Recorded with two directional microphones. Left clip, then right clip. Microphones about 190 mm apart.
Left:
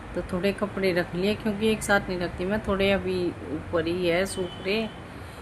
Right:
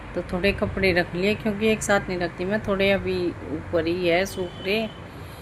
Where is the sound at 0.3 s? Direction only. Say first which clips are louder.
Right 4 dB; 5° right (ahead or behind).